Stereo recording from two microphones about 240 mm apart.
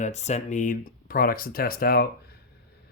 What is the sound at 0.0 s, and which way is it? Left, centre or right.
Speech, left.